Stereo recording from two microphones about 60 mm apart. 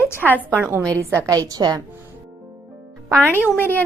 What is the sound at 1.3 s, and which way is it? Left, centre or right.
Speech, right.